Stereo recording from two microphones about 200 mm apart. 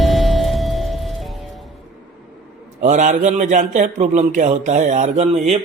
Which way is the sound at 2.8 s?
35° right (ahead or behind).